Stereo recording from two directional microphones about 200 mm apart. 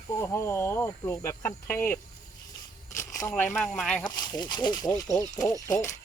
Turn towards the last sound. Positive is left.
turn(degrees=15)  # may be behind; listen again after turning